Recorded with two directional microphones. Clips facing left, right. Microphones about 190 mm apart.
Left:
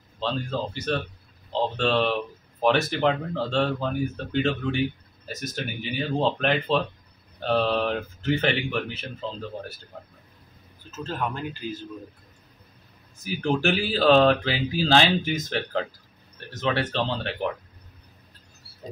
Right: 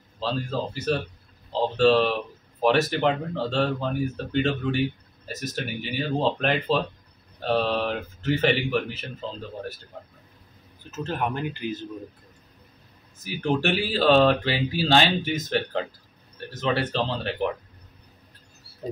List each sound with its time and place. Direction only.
0.2 s speech: centre (ahead or behind)
10.9 s a man's voice: 20° right (ahead or behind)
13.2 s speech: centre (ahead or behind)